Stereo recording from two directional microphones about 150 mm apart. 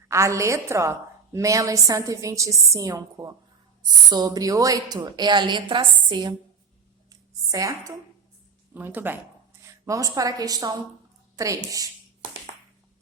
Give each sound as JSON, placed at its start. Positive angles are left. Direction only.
{"t": 0.1, "sound": "a woman's voice", "side_deg": -20}
{"t": 7.1, "sound": "a sound", "side_deg": -25}
{"t": 8.7, "sound": "a woman's voice", "side_deg": -15}